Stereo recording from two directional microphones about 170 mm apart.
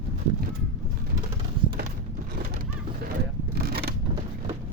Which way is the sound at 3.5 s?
70° right (ahead or behind).